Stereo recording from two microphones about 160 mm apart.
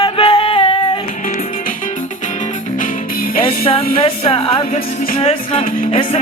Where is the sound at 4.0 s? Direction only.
35° left (ahead or behind).